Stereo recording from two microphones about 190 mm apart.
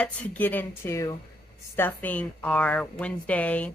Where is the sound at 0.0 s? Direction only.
10° left (ahead or behind).